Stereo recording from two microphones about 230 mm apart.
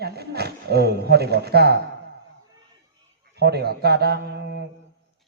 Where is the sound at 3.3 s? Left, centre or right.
Right.